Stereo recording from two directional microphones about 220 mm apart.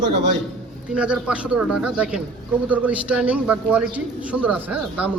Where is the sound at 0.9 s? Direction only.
5° right (ahead or behind).